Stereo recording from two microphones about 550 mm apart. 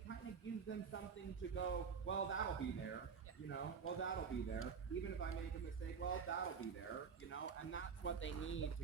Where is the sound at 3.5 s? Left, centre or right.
Centre.